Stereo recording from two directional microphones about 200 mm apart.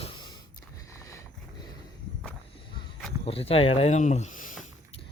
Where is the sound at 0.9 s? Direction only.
15° left (ahead or behind).